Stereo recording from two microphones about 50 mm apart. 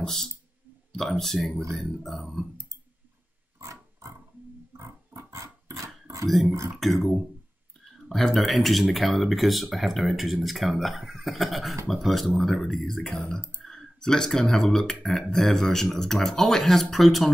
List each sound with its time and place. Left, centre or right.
0.0 s speech: centre
2.5 s clicking: right
3.5 s pig: right
4.7 s dog: right
6.2 s speech: centre
8.2 s speech: centre